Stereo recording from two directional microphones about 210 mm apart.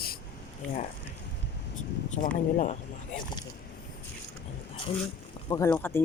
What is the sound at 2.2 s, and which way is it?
Speech, 40° left (ahead or behind).